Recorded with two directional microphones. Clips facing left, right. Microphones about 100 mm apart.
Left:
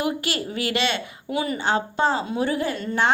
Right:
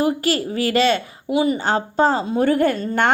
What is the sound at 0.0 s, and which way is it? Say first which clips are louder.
A woman's voice: right 6 dB; 40° right (ahead or behind).